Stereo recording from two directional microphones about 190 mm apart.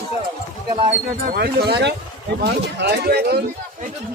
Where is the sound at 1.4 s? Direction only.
55° right (ahead or behind).